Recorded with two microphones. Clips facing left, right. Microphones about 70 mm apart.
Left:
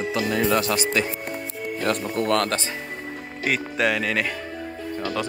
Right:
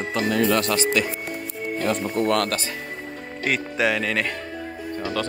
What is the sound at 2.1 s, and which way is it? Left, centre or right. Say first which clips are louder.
Speech: right 1 dB; right.